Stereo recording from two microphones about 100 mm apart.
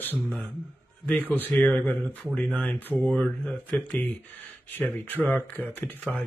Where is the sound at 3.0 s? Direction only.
5° left (ahead or behind).